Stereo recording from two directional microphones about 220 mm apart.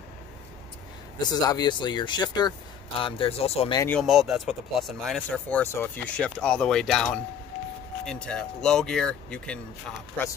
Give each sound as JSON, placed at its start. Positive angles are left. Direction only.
{"t": 1.3, "sound": "speech", "side_deg": 15}
{"t": 4.0, "sound": "speech", "side_deg": 0}